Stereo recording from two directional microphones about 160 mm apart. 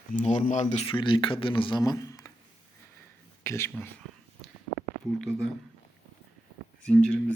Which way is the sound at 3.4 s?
20° left (ahead or behind).